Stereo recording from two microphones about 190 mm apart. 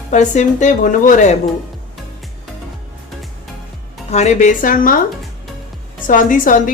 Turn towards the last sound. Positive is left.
turn(degrees=45)  # may be behind; listen again after turning